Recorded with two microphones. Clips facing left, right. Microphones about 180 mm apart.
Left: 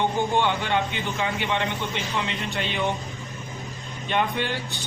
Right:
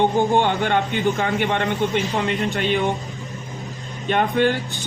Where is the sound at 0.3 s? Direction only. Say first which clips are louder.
Right 4 dB; 50° right (ahead or behind).